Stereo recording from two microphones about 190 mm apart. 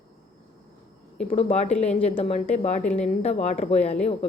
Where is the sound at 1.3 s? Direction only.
35° left (ahead or behind).